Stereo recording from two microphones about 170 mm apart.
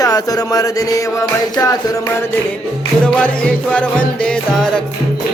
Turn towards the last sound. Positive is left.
turn(degrees=5)  # may be behind; listen again after turning